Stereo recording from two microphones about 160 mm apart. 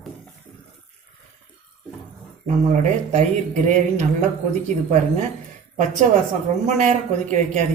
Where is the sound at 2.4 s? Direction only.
45° right (ahead or behind).